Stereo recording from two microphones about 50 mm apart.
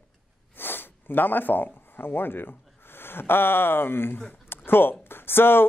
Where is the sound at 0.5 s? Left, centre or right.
Left.